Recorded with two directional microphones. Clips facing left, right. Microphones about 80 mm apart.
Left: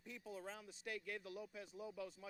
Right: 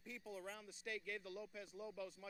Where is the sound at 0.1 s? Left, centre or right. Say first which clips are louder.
Even; left.